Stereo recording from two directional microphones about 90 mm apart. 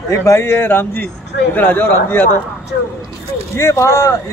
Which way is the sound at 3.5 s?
35° left (ahead or behind).